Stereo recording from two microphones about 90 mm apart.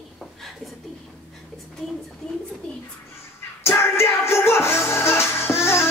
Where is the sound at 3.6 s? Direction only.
30° left (ahead or behind).